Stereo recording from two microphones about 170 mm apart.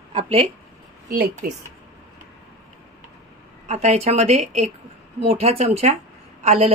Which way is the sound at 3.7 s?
40° right (ahead or behind).